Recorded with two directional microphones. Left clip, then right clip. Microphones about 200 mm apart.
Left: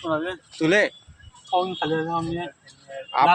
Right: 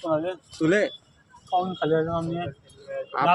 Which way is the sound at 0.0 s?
20° right (ahead or behind).